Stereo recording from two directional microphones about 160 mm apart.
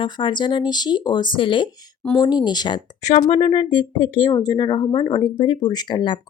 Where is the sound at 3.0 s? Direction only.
40° left (ahead or behind).